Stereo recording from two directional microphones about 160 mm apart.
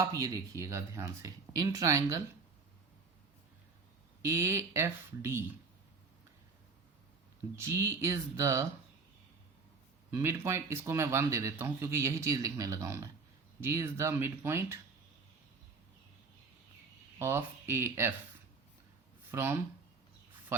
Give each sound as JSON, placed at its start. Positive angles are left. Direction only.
{"t": 0.0, "sound": "speech", "side_deg": -20}
{"t": 4.2, "sound": "speech", "side_deg": -15}
{"t": 7.6, "sound": "speech", "side_deg": -20}
{"t": 10.2, "sound": "speech", "side_deg": -15}
{"t": 17.2, "sound": "speech", "side_deg": -15}
{"t": 19.3, "sound": "speech", "side_deg": -15}